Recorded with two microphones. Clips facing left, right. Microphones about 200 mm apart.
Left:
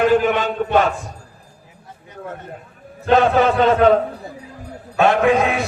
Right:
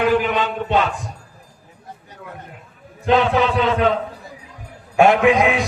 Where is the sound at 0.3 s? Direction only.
45° left (ahead or behind).